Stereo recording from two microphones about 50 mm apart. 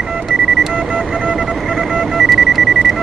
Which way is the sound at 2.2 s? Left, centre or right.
Centre.